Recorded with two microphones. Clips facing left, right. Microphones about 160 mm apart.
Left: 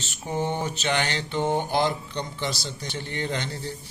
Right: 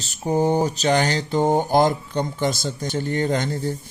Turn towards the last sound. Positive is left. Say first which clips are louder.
# right 8 dB
turn(degrees=-45)  # may be behind; listen again after turning